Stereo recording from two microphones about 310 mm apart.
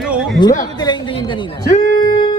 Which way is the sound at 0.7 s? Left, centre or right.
Centre.